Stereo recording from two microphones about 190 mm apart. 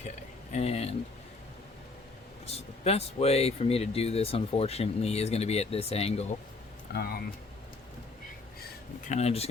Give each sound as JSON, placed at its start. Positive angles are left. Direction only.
{"t": 0.5, "sound": "speech", "side_deg": 35}
{"t": 2.5, "sound": "speech", "side_deg": 30}
{"t": 6.9, "sound": "speech", "side_deg": 55}
{"t": 9.0, "sound": "speech", "side_deg": 35}